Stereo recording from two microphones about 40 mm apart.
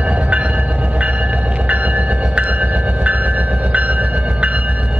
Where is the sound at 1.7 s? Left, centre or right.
Right.